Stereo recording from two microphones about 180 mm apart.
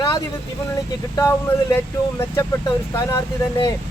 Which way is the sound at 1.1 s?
15° left (ahead or behind).